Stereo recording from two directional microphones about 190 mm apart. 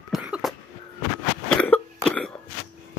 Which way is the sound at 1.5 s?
5° left (ahead or behind).